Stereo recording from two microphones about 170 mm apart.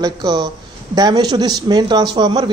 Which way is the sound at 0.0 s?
25° right (ahead or behind).